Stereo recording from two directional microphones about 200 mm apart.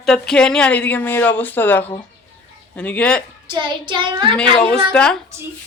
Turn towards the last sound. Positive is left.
turn(degrees=5)  # may be behind; listen again after turning